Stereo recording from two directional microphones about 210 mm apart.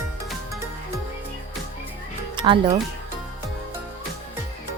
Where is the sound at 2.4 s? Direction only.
25° right (ahead or behind).